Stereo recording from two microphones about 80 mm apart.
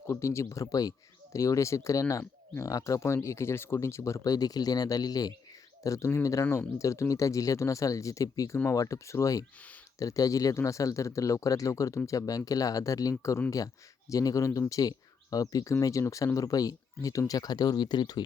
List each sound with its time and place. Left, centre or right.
0.1 s speech: left
5.8 s speech: left
6.4 s speech: left